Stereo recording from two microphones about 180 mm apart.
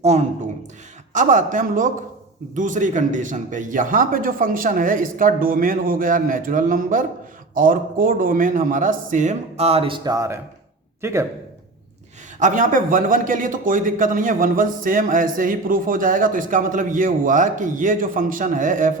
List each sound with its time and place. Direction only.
0.0 s a man's voice: 40° right (ahead or behind); by 11.3 s 15° right (ahead or behind)
12.4 s speech: 45° right (ahead or behind)